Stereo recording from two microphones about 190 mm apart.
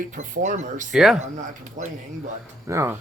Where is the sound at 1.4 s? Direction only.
40° right (ahead or behind).